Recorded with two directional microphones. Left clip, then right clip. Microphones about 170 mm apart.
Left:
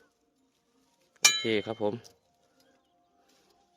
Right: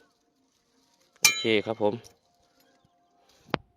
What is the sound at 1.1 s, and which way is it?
Speech, 15° right (ahead or behind).